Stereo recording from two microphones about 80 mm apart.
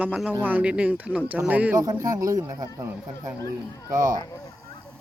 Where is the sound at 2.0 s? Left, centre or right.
Right.